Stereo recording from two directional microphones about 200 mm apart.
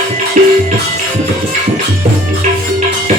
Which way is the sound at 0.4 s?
40° right (ahead or behind).